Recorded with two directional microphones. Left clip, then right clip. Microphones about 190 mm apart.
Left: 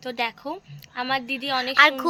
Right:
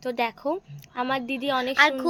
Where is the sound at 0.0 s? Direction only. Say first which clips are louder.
Right 1 dB; 50° right (ahead or behind).